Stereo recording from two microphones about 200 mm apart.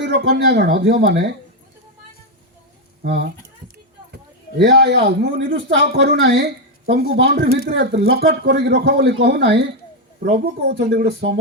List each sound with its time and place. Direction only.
0.0 s speech: 55° right (ahead or behind)
3.1 s speech: 55° right (ahead or behind)
4.5 s speech: 55° right (ahead or behind)